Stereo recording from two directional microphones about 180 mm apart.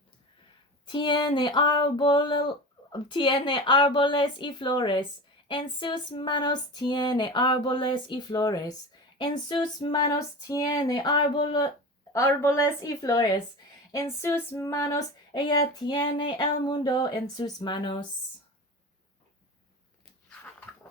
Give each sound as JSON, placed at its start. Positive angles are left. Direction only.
{"t": 0.9, "sound": "female singing", "side_deg": 25}
{"t": 12.1, "sound": "speech", "side_deg": 15}
{"t": 13.9, "sound": "female singing", "side_deg": 15}